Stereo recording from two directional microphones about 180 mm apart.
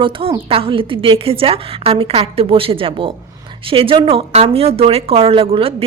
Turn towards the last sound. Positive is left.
turn(degrees=-30)  # may be behind; listen again after turning